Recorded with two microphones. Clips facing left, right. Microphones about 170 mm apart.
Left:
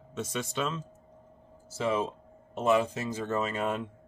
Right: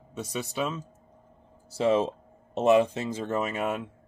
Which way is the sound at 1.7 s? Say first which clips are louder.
Right 5 dB; 30° right (ahead or behind).